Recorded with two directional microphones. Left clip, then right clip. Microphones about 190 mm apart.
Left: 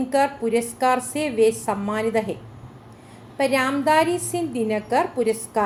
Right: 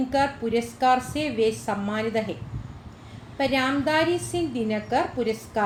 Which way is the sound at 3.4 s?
20° left (ahead or behind).